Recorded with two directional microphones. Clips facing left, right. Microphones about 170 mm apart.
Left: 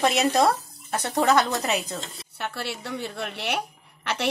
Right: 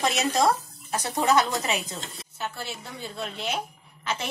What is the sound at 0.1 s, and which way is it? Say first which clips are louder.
Speech: left 2 dB; 60° left (ahead or behind).